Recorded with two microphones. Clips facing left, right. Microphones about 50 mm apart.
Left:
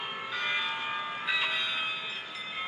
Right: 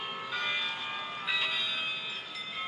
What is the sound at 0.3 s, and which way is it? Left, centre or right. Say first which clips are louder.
Music: left 2 dB; centre.